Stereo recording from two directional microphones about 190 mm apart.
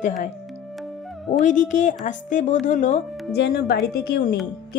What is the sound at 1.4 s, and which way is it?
Speech, 40° left (ahead or behind).